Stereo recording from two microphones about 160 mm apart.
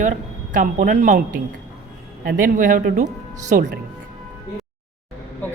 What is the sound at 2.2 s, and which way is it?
Speech, 70° right (ahead or behind).